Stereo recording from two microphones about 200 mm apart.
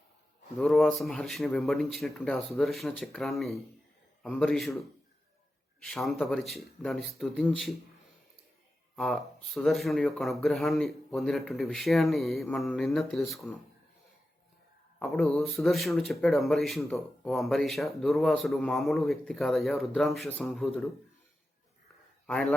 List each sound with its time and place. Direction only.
0.5 s speech: centre (ahead or behind)
9.0 s speech: centre (ahead or behind)
14.9 s speech: 5° left (ahead or behind)
22.3 s a man's voice: 5° left (ahead or behind)